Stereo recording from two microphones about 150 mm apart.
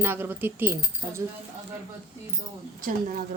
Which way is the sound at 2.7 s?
65° right (ahead or behind).